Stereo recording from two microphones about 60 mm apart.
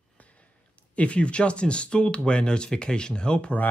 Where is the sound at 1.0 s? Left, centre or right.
Centre.